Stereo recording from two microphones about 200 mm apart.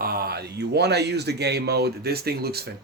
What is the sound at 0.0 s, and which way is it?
Speech, 50° right (ahead or behind).